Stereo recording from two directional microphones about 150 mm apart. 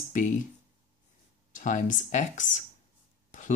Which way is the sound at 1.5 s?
60° left (ahead or behind).